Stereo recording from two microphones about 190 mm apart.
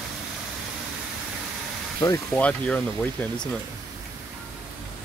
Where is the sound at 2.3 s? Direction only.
5° left (ahead or behind).